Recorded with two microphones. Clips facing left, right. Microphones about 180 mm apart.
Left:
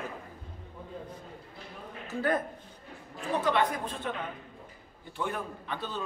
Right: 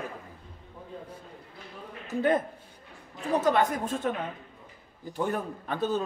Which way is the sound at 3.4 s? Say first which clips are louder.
Right 3 dB; 45° right (ahead or behind).